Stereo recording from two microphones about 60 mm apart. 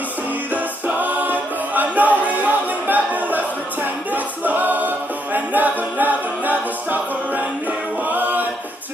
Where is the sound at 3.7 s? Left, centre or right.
Right.